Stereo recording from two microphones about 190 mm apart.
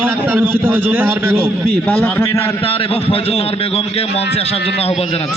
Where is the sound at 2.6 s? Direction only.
30° left (ahead or behind).